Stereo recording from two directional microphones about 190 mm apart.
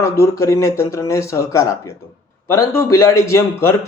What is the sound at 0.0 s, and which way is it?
Speech, 15° left (ahead or behind).